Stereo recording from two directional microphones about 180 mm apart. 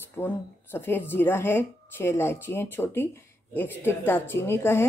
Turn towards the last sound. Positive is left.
turn(degrees=15)  # may be behind; listen again after turning